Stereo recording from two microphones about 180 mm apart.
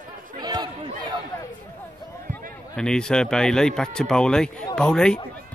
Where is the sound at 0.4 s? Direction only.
20° right (ahead or behind).